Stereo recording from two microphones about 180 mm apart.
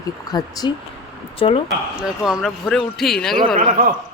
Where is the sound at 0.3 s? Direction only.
20° left (ahead or behind).